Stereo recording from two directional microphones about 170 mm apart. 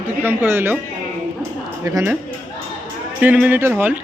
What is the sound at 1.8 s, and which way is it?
Speech, 20° right (ahead or behind).